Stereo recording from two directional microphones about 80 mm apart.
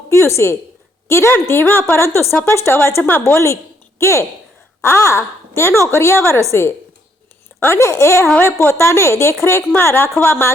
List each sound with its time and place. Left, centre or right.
0.1 s a woman's voice: left
7.9 s a woman's voice: left